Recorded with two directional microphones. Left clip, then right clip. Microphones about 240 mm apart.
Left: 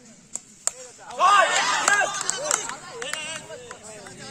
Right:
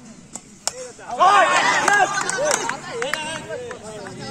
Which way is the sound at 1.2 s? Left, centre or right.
Left.